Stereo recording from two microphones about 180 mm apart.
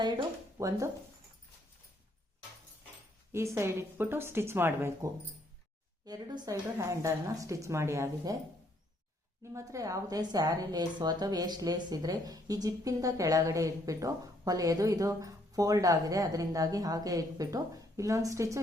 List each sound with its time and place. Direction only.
0.0 s speech: 20° right (ahead or behind)
3.3 s a woman's voice: 15° right (ahead or behind)
9.4 s a woman's voice: 15° right (ahead or behind)